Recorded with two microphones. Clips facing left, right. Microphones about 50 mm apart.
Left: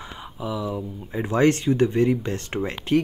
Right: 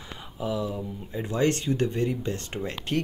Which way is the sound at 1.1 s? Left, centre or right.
Left.